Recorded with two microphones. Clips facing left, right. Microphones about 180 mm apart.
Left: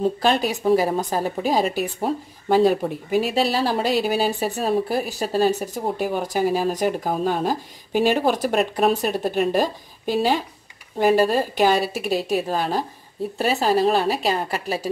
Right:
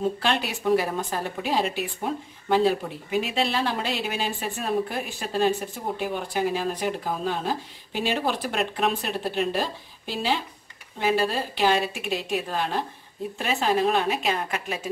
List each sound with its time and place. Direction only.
0.0 s a woman's voice: 40° left (ahead or behind)